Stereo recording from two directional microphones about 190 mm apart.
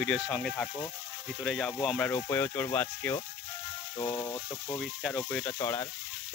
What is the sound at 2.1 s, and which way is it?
Speech, 10° left (ahead or behind).